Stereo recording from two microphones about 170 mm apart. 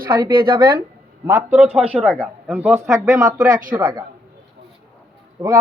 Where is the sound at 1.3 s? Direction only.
10° right (ahead or behind).